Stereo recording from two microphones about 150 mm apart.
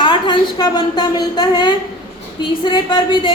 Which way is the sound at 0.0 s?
35° left (ahead or behind).